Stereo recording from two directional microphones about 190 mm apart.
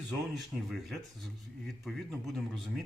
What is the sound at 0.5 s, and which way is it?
Speech, centre (ahead or behind).